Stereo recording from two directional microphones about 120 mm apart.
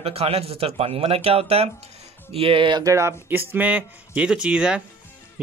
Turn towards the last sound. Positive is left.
turn(degrees=-10)  # may be behind; listen again after turning